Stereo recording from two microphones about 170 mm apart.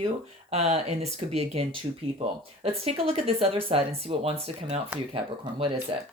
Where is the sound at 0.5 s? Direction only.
40° right (ahead or behind).